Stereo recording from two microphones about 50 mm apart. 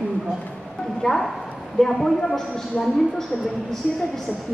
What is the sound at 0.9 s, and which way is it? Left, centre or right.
A man's voice, centre.